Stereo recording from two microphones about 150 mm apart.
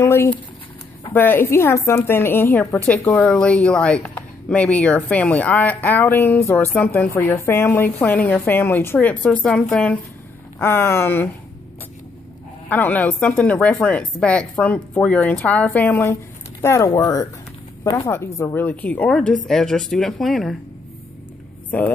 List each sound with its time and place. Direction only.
0.0 s a woman's voice: 15° left (ahead or behind)
12.6 s a woman's voice: 10° left (ahead or behind)
21.6 s speech: 10° left (ahead or behind)